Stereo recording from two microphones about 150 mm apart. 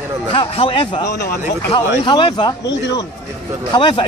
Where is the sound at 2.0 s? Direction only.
30° left (ahead or behind).